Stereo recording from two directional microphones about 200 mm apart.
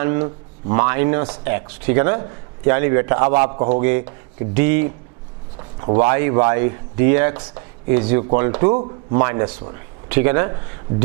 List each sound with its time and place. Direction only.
0.0 s speech: 15° right (ahead or behind)
5.5 s a sound: 25° right (ahead or behind)
6.0 s speech: 15° right (ahead or behind)
8.7 s a man's voice: 30° right (ahead or behind)
9.1 s speech: 15° right (ahead or behind)